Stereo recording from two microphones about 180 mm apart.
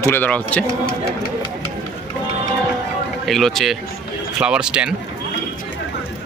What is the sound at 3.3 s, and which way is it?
Speech, centre (ahead or behind).